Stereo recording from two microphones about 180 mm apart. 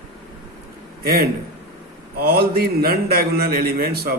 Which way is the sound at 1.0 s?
60° right (ahead or behind).